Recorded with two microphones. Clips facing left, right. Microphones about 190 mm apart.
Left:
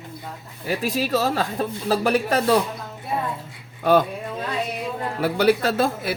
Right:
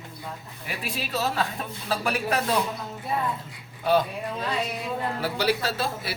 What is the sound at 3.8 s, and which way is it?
Speech, 50° left (ahead or behind).